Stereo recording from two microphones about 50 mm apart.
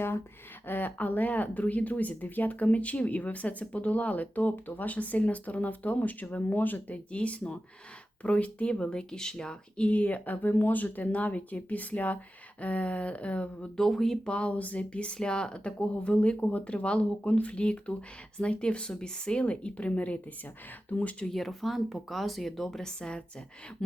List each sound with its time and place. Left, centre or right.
0.7 s speech: left
13.7 s speech: centre
14.3 s speech: left
21.2 s speech: centre